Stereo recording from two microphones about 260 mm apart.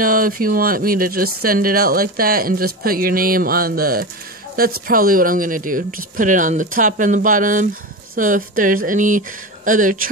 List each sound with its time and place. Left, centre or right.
0.0 s speech: right